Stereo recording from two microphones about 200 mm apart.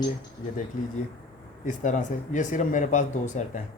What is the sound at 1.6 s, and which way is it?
Speech, 40° left (ahead or behind).